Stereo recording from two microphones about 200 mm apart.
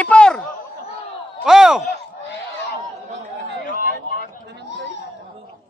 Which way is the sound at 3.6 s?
45° left (ahead or behind).